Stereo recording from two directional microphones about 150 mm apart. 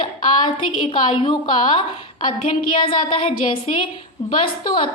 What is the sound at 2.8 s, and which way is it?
Speech, 35° left (ahead or behind).